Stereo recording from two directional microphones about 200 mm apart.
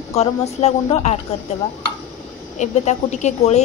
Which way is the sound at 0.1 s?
30° left (ahead or behind).